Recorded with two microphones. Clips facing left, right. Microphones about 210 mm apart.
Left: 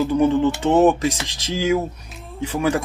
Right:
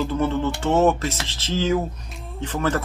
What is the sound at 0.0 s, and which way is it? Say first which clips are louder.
Speech: left 6 dB; 15° left (ahead or behind).